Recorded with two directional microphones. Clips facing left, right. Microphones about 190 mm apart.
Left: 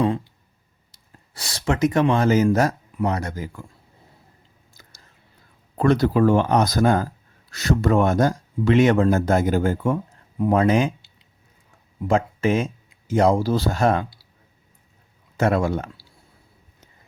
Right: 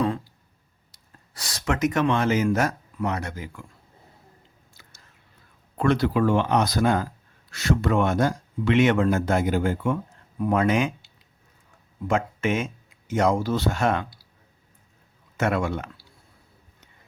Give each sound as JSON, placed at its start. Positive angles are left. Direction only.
{"t": 0.9, "sound": "speech", "side_deg": 25}
{"t": 4.7, "sound": "chewing", "side_deg": 40}
{"t": 5.7, "sound": "speech", "side_deg": 40}
{"t": 10.3, "sound": "speech", "side_deg": 25}
{"t": 12.0, "sound": "speech", "side_deg": 35}
{"t": 15.4, "sound": "speech", "side_deg": 35}